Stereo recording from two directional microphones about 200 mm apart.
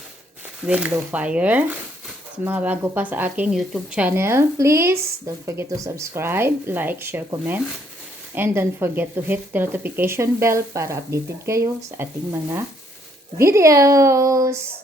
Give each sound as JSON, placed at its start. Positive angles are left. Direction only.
{"t": 0.6, "sound": "a woman's voice", "side_deg": -5}